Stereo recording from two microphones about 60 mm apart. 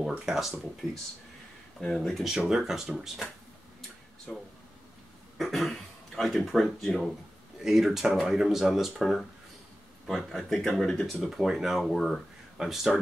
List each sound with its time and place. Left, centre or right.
0.2 s speech: centre
1.8 s speech: centre
2.2 s speech: centre
4.3 s speech: centre
5.4 s speech: centre
7.6 s speech: centre
11.2 s speech: centre